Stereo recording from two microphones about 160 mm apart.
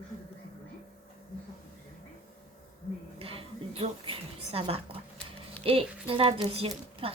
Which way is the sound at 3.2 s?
35° right (ahead or behind).